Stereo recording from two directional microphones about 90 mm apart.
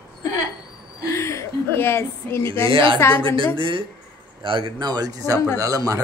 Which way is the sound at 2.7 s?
70° right (ahead or behind).